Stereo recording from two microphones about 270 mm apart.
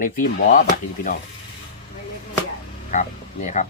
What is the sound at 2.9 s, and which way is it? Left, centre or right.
Speech, left.